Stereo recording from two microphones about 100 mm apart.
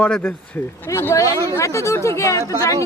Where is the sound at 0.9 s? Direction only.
25° left (ahead or behind).